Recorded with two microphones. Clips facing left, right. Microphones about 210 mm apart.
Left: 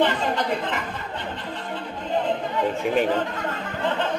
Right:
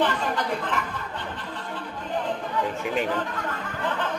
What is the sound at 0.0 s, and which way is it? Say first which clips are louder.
Chatter: left 3 dB; 20° left (ahead or behind).